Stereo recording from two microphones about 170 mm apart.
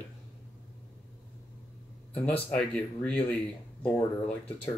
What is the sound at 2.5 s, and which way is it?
Speech, 5° left (ahead or behind).